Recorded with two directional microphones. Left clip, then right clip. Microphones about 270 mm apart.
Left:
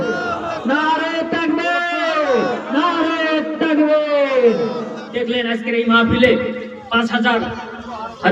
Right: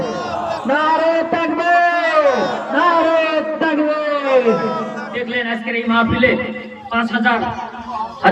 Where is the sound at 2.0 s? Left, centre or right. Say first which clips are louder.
Right 3 dB; centre.